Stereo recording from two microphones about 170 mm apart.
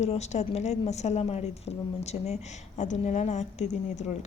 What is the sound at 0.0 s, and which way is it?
A woman's voice, 40° left (ahead or behind).